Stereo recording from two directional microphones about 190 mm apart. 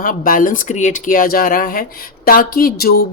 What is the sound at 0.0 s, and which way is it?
Speech, 45° left (ahead or behind).